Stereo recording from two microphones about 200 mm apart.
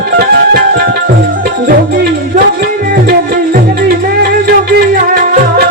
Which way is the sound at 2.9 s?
45° right (ahead or behind).